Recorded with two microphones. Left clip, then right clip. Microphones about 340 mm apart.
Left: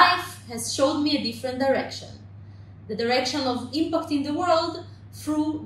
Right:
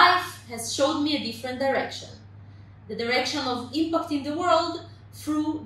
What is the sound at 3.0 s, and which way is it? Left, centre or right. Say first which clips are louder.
A woman's voice: left 2 dB; centre.